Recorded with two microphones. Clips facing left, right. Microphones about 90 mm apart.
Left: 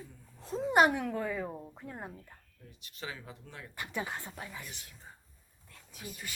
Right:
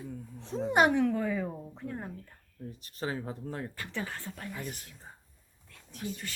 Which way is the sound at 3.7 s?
15° left (ahead or behind).